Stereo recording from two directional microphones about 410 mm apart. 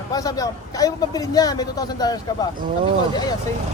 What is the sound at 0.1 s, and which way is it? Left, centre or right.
A man's voice, centre.